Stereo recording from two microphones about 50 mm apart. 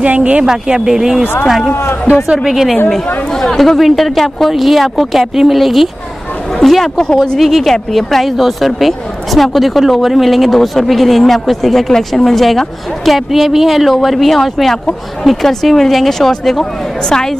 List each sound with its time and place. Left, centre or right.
0.0 s speech: right
0.5 s speech: centre
1.7 s speech: left
2.3 s speech: centre
3.3 s speech: centre
7.0 s speech: centre
7.3 s speech: centre